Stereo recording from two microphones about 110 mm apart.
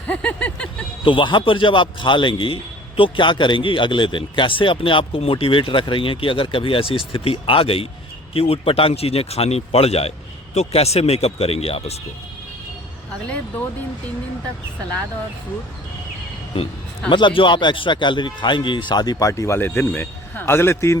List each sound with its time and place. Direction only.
0.1 s a sound: 10° left (ahead or behind)
1.0 s a man's voice: 50° left (ahead or behind); by 11.9 s 65° left (ahead or behind)
16.5 s speech: 60° left (ahead or behind)
17.1 s a man's voice: 45° left (ahead or behind)
19.3 s a man's voice: 25° left (ahead or behind)